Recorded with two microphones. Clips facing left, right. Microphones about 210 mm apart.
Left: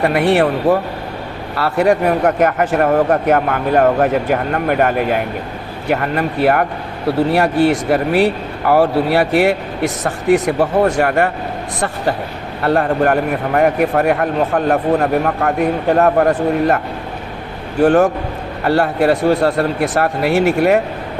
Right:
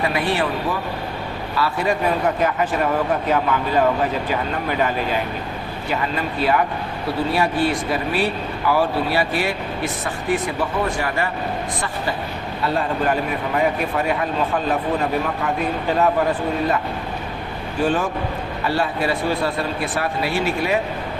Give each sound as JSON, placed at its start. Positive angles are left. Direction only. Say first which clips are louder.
{"t": 0.0, "sound": "speech", "louder": "left 8 dB", "side_deg": 70}
{"t": 12.6, "sound": "speech", "louder": "left 7 dB", "side_deg": 65}
{"t": 17.8, "sound": "speech", "louder": "left 10 dB", "side_deg": 65}